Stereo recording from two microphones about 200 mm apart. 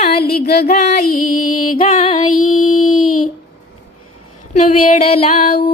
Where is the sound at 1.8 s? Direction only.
30° left (ahead or behind).